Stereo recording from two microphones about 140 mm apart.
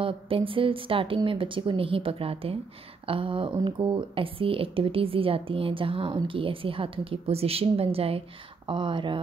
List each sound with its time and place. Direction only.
0.0 s speech: 40° right (ahead or behind)